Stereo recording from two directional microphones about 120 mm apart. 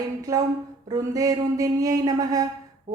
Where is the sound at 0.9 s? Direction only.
30° right (ahead or behind).